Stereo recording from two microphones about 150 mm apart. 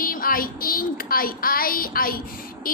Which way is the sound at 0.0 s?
70° left (ahead or behind).